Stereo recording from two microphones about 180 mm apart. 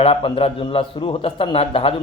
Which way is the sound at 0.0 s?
30° left (ahead or behind).